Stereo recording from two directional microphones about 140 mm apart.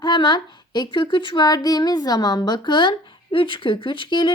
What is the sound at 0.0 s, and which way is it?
Speech, 30° left (ahead or behind).